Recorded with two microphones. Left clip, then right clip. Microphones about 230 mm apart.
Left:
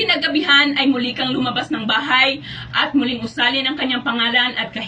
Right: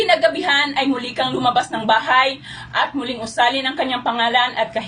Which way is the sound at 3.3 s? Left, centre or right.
Right.